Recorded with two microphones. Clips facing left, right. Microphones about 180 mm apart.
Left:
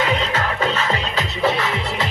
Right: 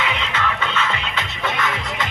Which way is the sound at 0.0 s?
40° left (ahead or behind).